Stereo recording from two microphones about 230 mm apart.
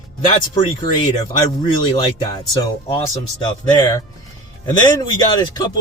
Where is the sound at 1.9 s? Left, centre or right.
Centre.